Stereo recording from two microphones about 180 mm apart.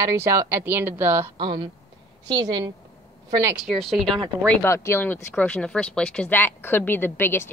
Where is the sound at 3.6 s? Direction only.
Centre (ahead or behind).